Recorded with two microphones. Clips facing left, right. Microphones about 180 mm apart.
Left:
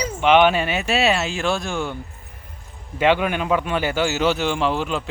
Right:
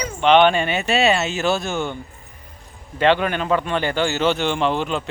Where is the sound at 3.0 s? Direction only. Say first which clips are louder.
Right 1 dB; 10° left (ahead or behind).